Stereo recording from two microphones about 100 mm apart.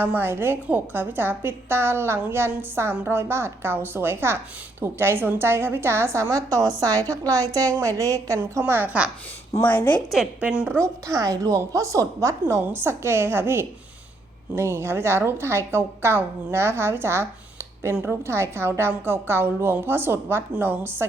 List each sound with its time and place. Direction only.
0.0 s a woman's voice: 20° right (ahead or behind)
9.6 s a woman's voice: 15° left (ahead or behind)
10.4 s a woman's voice: 15° right (ahead or behind)
10.8 s a woman's voice: 35° right (ahead or behind)